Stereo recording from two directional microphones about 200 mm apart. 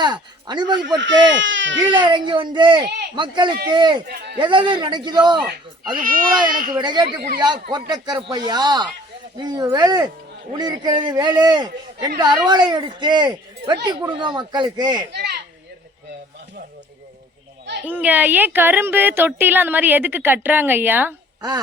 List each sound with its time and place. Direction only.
0.0 s a man's voice: 20° right (ahead or behind)
0.9 s speech: 65° right (ahead or behind)
1.9 s a man's voice: 25° right (ahead or behind)
4.0 s speech: 55° right (ahead or behind)
4.4 s a man's voice: 25° right (ahead or behind)
6.0 s speech: 45° right (ahead or behind)
6.7 s a man's voice: 20° right (ahead or behind)
17.8 s speech: 10° right (ahead or behind)